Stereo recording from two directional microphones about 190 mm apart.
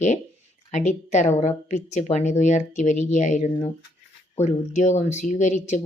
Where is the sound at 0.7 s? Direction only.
40° left (ahead or behind).